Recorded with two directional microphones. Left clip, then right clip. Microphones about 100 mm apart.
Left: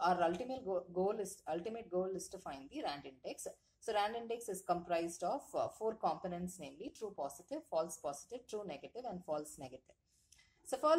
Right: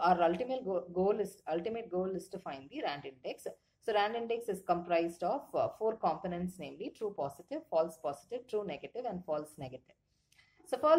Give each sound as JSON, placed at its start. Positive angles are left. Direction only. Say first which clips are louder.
{"t": 0.0, "sound": "speech", "louder": "right 5 dB", "side_deg": 35}